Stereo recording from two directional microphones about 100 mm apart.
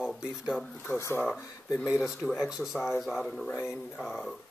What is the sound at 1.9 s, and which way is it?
Speech, 5° right (ahead or behind).